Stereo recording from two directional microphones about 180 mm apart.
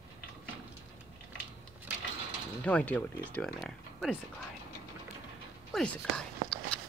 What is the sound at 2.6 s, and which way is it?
Speech, 5° left (ahead or behind).